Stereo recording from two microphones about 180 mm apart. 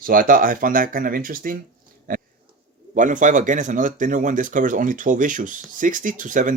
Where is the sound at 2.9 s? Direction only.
45° right (ahead or behind).